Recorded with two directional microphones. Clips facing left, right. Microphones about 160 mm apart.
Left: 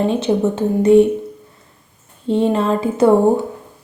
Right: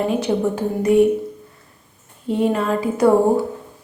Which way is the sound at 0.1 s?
25° left (ahead or behind).